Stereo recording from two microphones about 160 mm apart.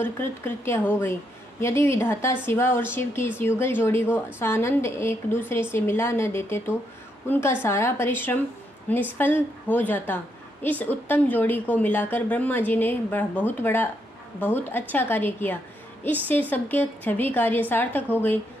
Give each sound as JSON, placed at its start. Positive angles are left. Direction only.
{"t": 0.0, "sound": "a woman's voice", "side_deg": 15}